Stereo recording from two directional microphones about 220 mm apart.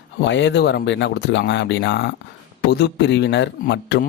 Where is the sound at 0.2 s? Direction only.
55° left (ahead or behind).